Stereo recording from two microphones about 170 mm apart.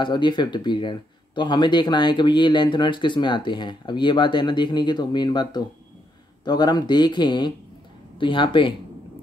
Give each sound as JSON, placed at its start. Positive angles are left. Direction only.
{"t": 0.0, "sound": "speech", "side_deg": 25}